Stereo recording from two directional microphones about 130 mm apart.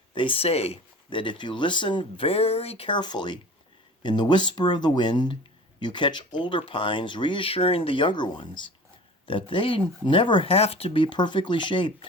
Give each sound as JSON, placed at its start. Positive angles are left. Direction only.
{"t": 0.1, "sound": "speech", "side_deg": 40}